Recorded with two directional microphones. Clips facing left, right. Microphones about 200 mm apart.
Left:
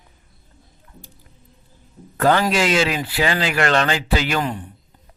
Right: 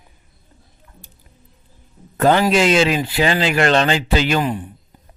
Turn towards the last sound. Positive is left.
turn(degrees=-15)  # may be behind; listen again after turning